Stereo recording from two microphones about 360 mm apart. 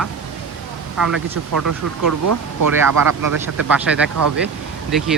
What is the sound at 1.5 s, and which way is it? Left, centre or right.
Speech, right.